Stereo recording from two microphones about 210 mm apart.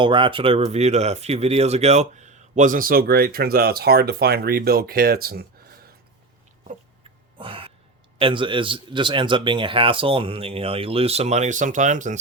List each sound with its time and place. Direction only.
0.0 s speech: 25° right (ahead or behind); by 5.9 s 45° right (ahead or behind)
7.0 s a sound: 25° right (ahead or behind)
8.2 s a man's voice: 25° right (ahead or behind)